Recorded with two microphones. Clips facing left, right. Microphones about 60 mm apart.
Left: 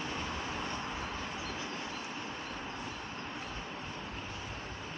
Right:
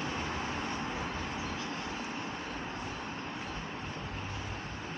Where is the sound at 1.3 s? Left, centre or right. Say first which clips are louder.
Right 2 dB; right.